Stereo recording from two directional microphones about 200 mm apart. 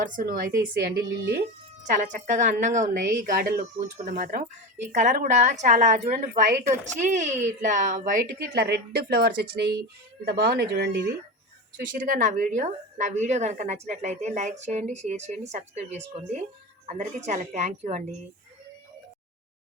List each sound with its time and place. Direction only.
0.0 s speech: 45° right (ahead or behind)
1.8 s a woman's voice: 40° right (ahead or behind); by 11.0 s 55° right (ahead or behind)
11.8 s a woman's voice: 45° right (ahead or behind)